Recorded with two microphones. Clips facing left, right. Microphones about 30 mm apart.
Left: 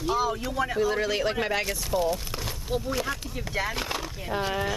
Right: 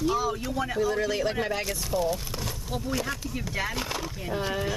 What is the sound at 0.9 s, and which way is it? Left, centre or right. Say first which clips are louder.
Speech: left 1 dB; left.